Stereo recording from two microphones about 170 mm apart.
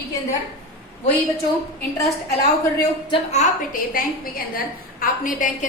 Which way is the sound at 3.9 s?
55° left (ahead or behind).